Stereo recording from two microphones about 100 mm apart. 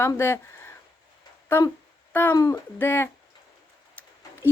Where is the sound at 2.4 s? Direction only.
40° left (ahead or behind).